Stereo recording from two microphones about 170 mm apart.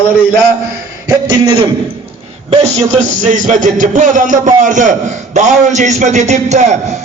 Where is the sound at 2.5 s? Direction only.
40° right (ahead or behind).